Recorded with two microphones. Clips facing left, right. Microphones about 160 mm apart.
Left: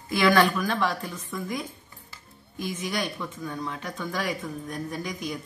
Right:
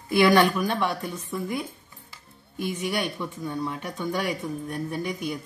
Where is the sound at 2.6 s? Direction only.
65° right (ahead or behind).